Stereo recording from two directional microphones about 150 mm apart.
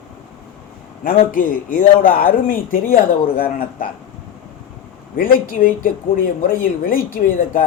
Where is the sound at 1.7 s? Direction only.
65° left (ahead or behind).